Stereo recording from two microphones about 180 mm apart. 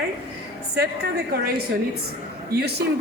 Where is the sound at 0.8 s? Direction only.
60° right (ahead or behind).